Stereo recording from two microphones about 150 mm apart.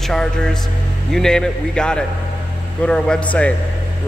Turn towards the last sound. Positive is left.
turn(degrees=10)  # may be behind; listen again after turning